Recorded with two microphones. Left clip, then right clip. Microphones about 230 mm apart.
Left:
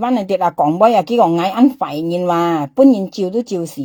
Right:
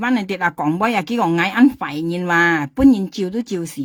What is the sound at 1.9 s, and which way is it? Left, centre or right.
Speech, right.